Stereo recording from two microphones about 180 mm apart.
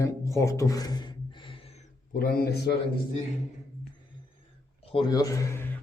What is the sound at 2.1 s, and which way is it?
Speech, 55° left (ahead or behind).